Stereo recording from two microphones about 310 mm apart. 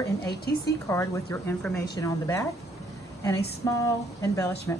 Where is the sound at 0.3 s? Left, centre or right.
Left.